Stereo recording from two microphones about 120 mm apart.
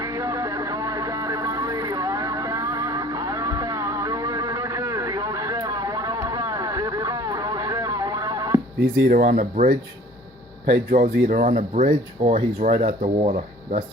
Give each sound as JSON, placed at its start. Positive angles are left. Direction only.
{"t": 0.0, "sound": "a sound", "side_deg": -25}
{"t": 9.2, "sound": "speech", "side_deg": -90}
{"t": 10.9, "sound": "speech", "side_deg": -85}